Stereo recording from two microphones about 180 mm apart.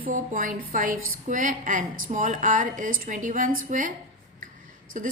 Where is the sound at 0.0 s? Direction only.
50° right (ahead or behind).